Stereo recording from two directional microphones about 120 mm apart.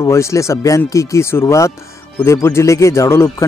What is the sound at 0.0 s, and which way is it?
Speech, 25° left (ahead or behind).